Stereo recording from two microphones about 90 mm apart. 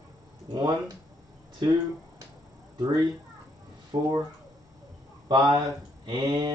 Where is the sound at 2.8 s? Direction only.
50° right (ahead or behind).